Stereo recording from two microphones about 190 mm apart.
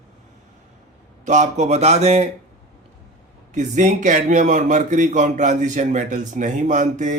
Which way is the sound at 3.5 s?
40° right (ahead or behind).